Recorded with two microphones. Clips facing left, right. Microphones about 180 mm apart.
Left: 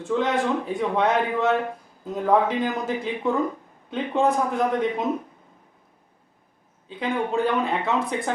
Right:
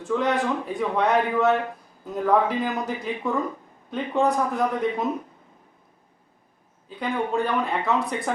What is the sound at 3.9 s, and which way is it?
Speech, centre (ahead or behind).